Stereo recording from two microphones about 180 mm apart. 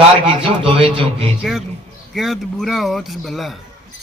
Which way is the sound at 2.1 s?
Centre (ahead or behind).